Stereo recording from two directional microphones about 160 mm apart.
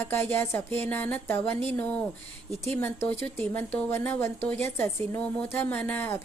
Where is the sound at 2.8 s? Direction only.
15° left (ahead or behind).